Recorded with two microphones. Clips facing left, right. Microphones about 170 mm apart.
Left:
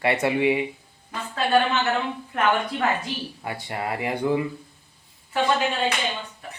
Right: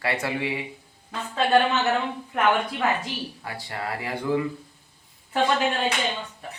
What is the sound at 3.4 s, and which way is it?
Speech, 20° left (ahead or behind).